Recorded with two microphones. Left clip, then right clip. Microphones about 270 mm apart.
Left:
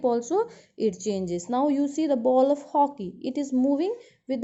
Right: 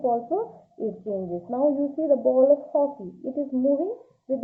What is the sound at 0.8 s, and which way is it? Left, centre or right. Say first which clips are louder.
A woman's voice: left 2 dB; left.